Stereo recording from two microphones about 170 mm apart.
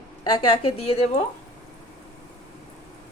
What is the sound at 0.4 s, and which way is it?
Speech, 35° left (ahead or behind).